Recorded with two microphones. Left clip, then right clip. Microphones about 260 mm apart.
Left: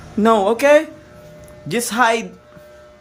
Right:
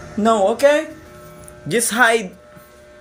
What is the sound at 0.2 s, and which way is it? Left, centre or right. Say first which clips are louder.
Speech: even; centre.